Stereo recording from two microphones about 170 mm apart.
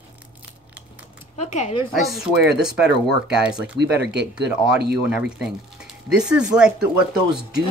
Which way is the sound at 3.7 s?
90° right.